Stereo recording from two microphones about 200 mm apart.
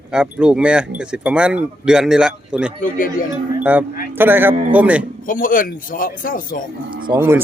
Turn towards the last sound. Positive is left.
turn(degrees=-10)  # may be behind; listen again after turning